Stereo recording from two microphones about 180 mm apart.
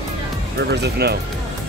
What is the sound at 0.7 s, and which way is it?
Speech, 65° right (ahead or behind).